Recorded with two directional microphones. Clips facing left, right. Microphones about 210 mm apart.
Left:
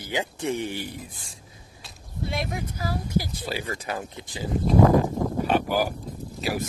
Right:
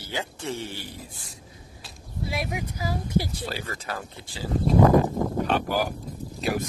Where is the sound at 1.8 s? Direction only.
Centre (ahead or behind).